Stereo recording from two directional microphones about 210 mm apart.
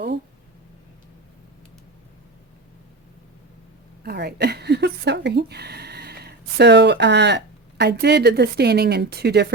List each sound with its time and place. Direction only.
4.0 s speech: 50° right (ahead or behind)